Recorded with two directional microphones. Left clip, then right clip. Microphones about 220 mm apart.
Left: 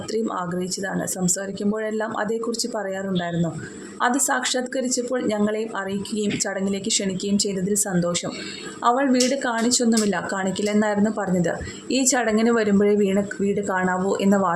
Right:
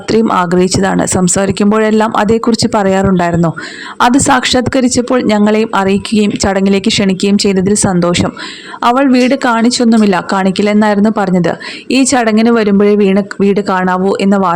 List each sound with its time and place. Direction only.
0.1 s speech: 40° right (ahead or behind)